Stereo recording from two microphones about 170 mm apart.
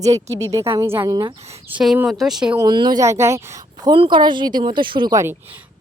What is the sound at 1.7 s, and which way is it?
Speech, 5° right (ahead or behind).